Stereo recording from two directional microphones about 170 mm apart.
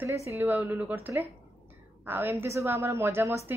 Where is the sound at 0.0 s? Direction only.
15° right (ahead or behind).